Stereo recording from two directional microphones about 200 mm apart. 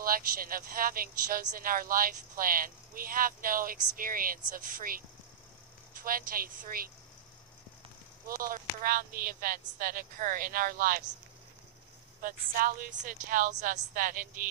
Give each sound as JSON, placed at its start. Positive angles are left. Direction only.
{"t": 0.0, "sound": "speech", "side_deg": -45}
{"t": 8.3, "sound": "speech", "side_deg": -45}
{"t": 12.2, "sound": "speech", "side_deg": -45}